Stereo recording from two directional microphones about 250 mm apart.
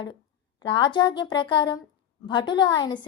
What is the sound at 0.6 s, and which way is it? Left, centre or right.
Speech, centre.